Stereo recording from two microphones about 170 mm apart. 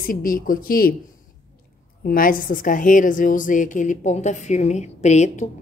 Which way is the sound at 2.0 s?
55° left (ahead or behind).